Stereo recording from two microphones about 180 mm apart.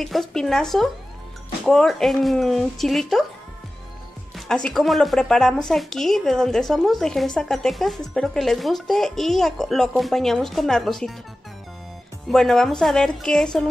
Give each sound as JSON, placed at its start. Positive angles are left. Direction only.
{"t": 0.0, "sound": "speech", "side_deg": 0}
{"t": 4.5, "sound": "speech", "side_deg": 5}
{"t": 12.3, "sound": "speech", "side_deg": 0}